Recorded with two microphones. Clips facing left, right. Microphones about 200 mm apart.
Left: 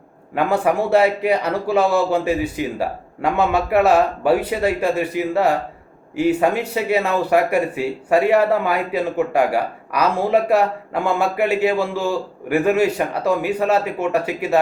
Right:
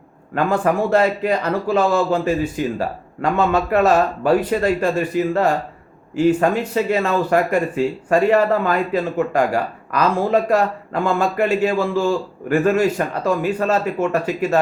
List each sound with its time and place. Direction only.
0.3 s speech: 10° left (ahead or behind)